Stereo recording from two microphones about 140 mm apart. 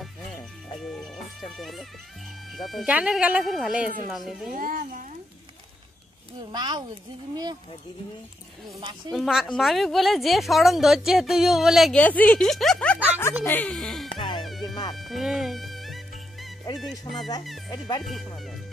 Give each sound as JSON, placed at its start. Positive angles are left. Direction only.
{"t": 0.8, "sound": "music", "side_deg": 0}
{"t": 2.5, "sound": "a woman's voice", "side_deg": 0}
{"t": 4.6, "sound": "speech", "side_deg": -70}
{"t": 6.5, "sound": "speech", "side_deg": -30}
{"t": 9.1, "sound": "a woman's voice", "side_deg": 0}
{"t": 12.0, "sound": "speech", "side_deg": 10}
{"t": 14.1, "sound": "music", "side_deg": 35}
{"t": 15.0, "sound": "music", "side_deg": 0}
{"t": 17.1, "sound": "speech", "side_deg": 30}
{"t": 18.0, "sound": "a woman's voice", "side_deg": 0}